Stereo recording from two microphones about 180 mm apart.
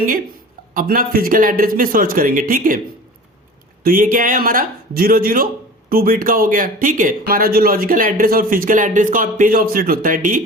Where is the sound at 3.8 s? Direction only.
50° right (ahead or behind).